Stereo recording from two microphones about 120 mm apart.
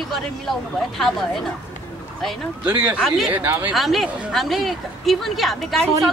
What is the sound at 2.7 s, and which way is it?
Speech, 15° right (ahead or behind).